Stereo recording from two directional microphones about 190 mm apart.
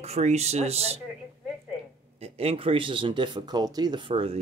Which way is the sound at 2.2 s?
35° right (ahead or behind).